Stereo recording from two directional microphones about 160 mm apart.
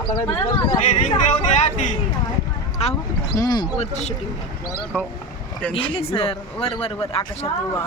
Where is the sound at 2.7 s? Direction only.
40° left (ahead or behind).